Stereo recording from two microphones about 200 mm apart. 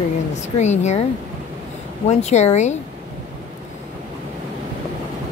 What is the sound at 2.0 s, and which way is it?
Speech, 35° left (ahead or behind).